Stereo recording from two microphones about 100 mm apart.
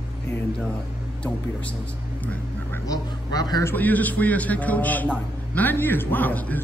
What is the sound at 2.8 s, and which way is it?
Speech, 40° left (ahead or behind).